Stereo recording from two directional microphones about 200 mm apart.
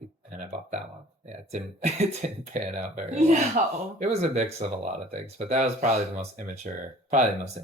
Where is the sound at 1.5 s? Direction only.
35° right (ahead or behind).